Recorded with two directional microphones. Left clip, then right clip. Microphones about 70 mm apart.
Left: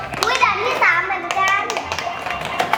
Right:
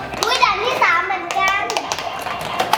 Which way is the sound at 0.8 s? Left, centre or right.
Centre.